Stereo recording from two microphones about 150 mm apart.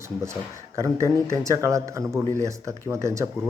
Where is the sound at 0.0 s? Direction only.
20° right (ahead or behind).